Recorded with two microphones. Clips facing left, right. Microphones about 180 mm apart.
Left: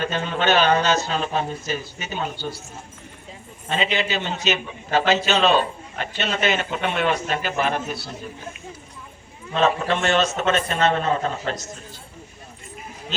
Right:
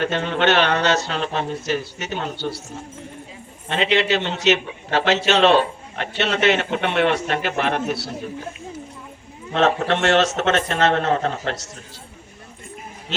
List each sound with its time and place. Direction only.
0.0 s a man's voice: 75° right (ahead or behind)
3.7 s a man's voice: 75° right (ahead or behind)
9.5 s a man's voice: 80° right